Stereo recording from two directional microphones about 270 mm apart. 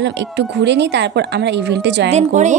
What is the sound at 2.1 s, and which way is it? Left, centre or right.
Speech, right.